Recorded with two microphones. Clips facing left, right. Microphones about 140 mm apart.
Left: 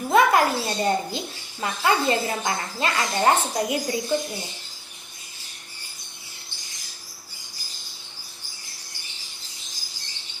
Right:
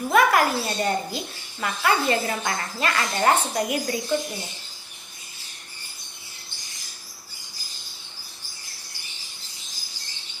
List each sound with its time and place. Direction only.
0.1 s a child's voice: 25° left (ahead or behind)